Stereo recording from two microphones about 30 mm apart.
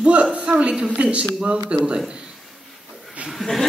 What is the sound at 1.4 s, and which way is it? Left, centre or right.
Speech, right.